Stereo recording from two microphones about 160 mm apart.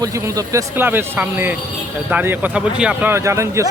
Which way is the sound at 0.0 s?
20° right (ahead or behind).